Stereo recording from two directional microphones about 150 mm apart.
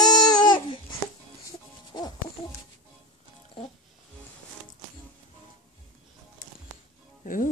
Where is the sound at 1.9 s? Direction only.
25° left (ahead or behind).